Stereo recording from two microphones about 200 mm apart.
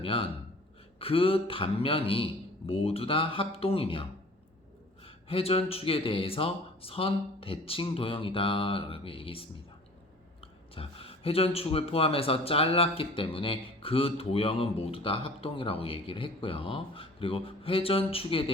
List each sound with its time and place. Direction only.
0.0 s speech: 25° left (ahead or behind)
5.0 s speech: 30° left (ahead or behind)
10.8 s speech: 30° left (ahead or behind)